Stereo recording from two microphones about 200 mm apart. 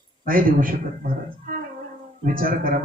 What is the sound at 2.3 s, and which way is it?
Speech, 45° right (ahead or behind).